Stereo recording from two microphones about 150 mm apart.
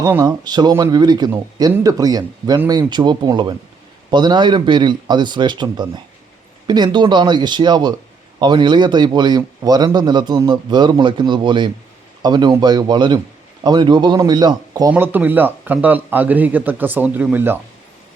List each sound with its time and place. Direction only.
0.0 s speech: 15° right (ahead or behind)
0.3 s a man's voice: 30° right (ahead or behind)
14.9 s speech: 15° right (ahead or behind)